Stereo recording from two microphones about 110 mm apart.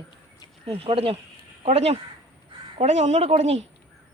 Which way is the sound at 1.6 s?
70° right (ahead or behind).